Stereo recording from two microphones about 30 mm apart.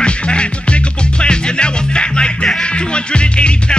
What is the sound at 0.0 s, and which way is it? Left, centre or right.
Music, left.